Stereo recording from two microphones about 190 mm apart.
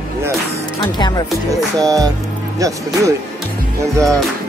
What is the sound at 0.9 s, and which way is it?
Speech, 20° left (ahead or behind).